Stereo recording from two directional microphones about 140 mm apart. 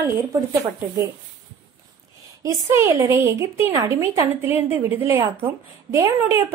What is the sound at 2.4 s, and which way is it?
A woman's voice, 20° right (ahead or behind).